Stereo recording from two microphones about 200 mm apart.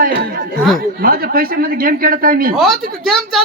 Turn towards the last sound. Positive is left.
turn(degrees=0)  # may be behind; listen again after turning